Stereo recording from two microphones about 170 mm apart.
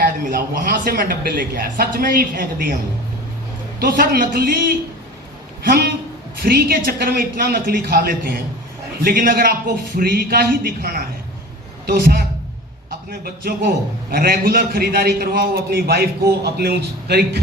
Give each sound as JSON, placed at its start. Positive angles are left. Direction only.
{"t": 0.0, "sound": "a man's voice", "side_deg": -55}
{"t": 3.8, "sound": "a man's voice", "side_deg": -60}
{"t": 5.6, "sound": "a sound", "side_deg": -60}
{"t": 6.4, "sound": "a man's voice", "side_deg": -60}